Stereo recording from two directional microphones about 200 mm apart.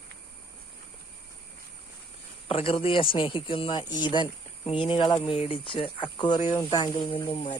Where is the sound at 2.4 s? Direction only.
30° left (ahead or behind).